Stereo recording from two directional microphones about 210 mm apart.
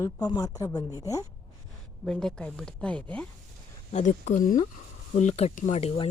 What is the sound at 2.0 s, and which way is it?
A woman's voice, centre (ahead or behind).